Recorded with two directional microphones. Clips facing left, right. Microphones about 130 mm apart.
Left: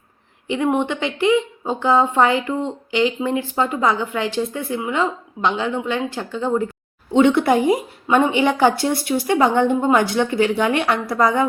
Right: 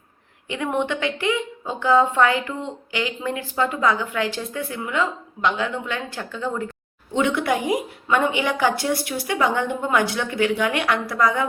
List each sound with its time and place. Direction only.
0.4 s a woman's voice: 25° left (ahead or behind)